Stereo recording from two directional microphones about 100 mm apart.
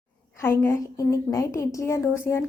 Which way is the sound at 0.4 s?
25° left (ahead or behind).